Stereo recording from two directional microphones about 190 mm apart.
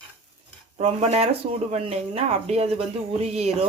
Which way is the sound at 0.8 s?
35° right (ahead or behind).